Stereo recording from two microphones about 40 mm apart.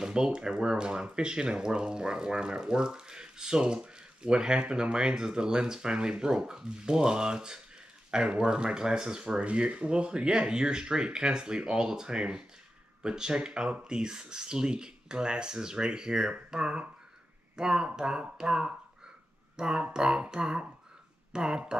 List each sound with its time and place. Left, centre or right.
0.0 s speech: right
9.4 s speech: right